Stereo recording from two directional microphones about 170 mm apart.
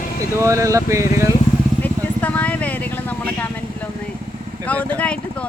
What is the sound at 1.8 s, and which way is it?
Vehicle, 10° left (ahead or behind).